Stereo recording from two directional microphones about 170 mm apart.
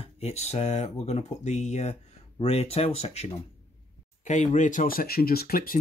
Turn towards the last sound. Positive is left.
turn(degrees=60)  # may be behind; listen again after turning